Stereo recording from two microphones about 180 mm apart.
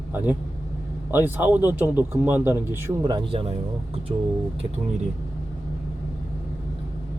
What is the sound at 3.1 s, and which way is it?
Speech, 30° right (ahead or behind).